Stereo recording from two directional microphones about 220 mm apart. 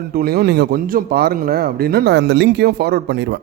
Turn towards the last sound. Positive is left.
turn(degrees=-50)  # may be behind; listen again after turning